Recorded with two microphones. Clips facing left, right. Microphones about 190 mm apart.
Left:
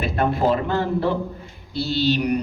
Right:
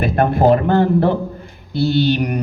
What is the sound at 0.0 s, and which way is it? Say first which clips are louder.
A man's voice: right 6 dB; 55° right (ahead or behind).